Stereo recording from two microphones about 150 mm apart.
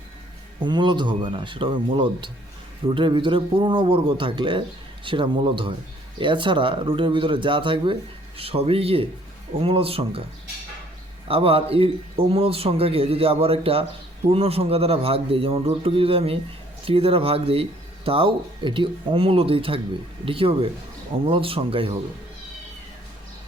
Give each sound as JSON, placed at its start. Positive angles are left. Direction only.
{"t": 0.6, "sound": "speech", "side_deg": -30}
{"t": 11.3, "sound": "speech", "side_deg": -40}